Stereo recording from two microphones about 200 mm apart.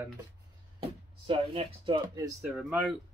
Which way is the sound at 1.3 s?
25° right (ahead or behind).